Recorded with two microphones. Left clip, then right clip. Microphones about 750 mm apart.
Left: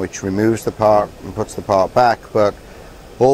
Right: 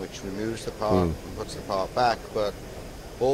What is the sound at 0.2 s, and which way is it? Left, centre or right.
Speech, left.